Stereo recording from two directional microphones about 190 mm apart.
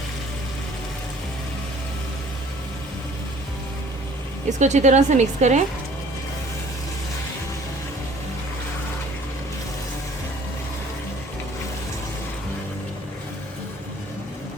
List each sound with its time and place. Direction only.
4.4 s a woman's voice: 40° right (ahead or behind)